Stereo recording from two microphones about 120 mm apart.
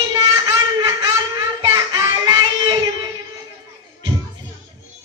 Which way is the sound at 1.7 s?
40° right (ahead or behind).